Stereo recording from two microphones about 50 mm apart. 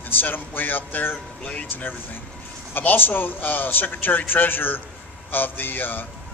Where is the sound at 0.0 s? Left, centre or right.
Left.